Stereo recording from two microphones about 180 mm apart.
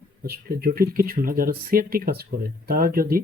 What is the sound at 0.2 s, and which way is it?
Speech, 60° right (ahead or behind).